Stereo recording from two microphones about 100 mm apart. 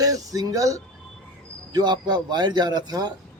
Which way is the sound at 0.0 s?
35° right (ahead or behind).